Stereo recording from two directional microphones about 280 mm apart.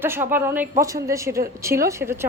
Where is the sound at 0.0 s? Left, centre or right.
Centre.